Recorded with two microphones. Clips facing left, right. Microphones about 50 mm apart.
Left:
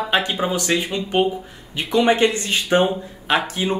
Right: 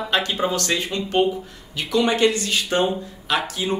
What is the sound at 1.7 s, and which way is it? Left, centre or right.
Speech, left.